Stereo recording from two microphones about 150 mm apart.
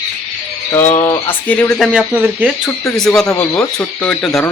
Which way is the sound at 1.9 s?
5° right (ahead or behind).